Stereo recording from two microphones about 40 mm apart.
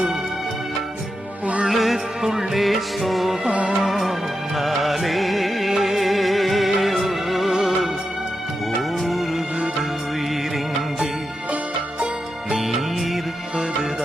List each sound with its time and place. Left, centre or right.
1.7 s music: centre
3.4 s music: right
3.8 s music: centre